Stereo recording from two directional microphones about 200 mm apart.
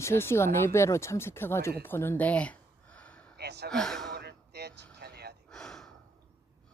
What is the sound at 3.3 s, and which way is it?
Gasp, 55° right (ahead or behind).